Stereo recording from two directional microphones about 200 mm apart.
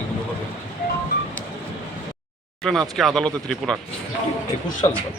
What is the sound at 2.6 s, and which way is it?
Speech, centre (ahead or behind).